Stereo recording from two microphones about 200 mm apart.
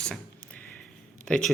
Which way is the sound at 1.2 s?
5° left (ahead or behind).